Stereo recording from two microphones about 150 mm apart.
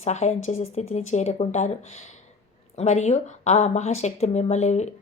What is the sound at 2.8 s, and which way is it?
Speech, 50° left (ahead or behind).